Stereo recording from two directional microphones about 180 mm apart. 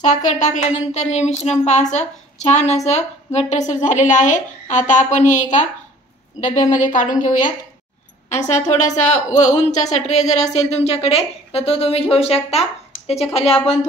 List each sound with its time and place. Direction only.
0.0 s speech: 40° left (ahead or behind)
6.7 s a woman's voice: 45° left (ahead or behind)